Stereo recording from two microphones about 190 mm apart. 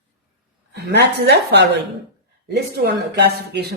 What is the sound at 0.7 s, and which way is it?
Speech, 60° right (ahead or behind).